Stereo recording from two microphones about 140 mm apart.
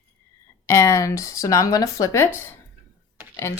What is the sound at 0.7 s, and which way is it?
Speech, 20° left (ahead or behind).